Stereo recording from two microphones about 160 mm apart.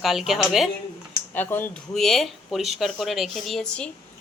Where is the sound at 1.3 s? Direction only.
10° left (ahead or behind).